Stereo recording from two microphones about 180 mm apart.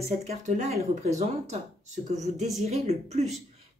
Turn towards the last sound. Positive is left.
turn(degrees=-35)  # may be behind; listen again after turning